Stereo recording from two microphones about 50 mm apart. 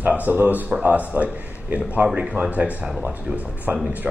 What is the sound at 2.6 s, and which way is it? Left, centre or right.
Speech, right.